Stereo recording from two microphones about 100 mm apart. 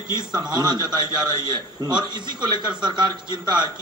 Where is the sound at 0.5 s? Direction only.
45° right (ahead or behind).